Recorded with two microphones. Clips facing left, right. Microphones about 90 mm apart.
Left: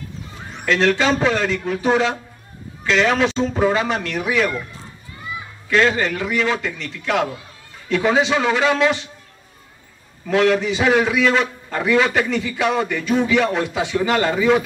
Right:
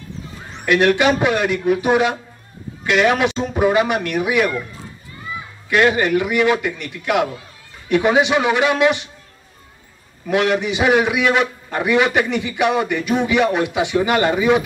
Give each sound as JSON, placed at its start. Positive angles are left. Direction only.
{"t": 0.7, "sound": "speech", "side_deg": -15}
{"t": 5.7, "sound": "speech", "side_deg": -15}
{"t": 10.2, "sound": "a man's voice", "side_deg": -20}